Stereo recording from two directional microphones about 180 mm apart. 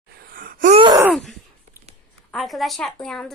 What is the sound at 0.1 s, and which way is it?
Gasp, 55° right (ahead or behind).